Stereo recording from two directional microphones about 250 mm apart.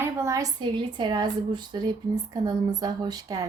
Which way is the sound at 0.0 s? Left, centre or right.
Centre.